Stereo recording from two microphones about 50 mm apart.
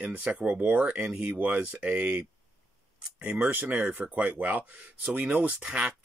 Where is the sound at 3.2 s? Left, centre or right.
Right.